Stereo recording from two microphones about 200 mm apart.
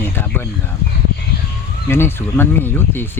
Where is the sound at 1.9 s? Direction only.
10° left (ahead or behind).